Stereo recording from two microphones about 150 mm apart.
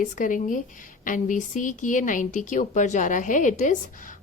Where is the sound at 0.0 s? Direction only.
60° left (ahead or behind).